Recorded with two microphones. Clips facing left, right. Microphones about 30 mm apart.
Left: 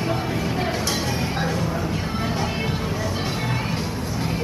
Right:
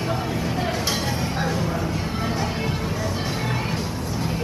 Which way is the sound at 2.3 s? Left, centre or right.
Centre.